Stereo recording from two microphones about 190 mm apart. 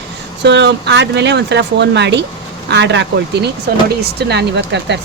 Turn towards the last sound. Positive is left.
turn(degrees=-65)  # may be behind; listen again after turning